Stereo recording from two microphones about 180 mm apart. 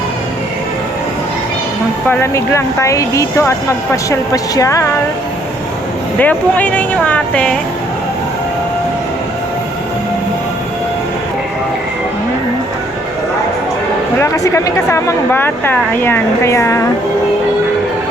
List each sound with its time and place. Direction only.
2.0 s speech: 15° left (ahead or behind)
6.1 s speech: 10° left (ahead or behind)
14.2 s speech: 15° left (ahead or behind)